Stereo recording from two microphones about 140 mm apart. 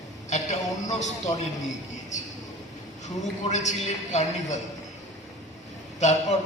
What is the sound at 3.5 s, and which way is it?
A man's voice, 55° left (ahead or behind).